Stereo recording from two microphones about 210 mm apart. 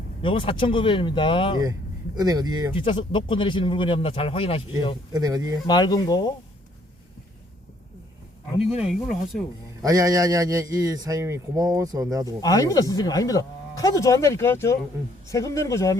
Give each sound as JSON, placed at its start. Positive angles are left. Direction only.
{"t": 0.2, "sound": "speech", "side_deg": 25}
{"t": 2.1, "sound": "a man's voice", "side_deg": -20}
{"t": 2.7, "sound": "speech", "side_deg": 25}
{"t": 5.1, "sound": "a man's voice", "side_deg": -15}
{"t": 5.6, "sound": "speech", "side_deg": 20}
{"t": 8.7, "sound": "speech", "side_deg": 0}
{"t": 9.8, "sound": "a man's voice", "side_deg": -15}
{"t": 12.4, "sound": "speech", "side_deg": 15}